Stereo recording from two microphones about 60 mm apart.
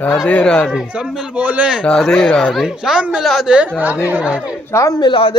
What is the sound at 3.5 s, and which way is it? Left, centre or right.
Speech, right.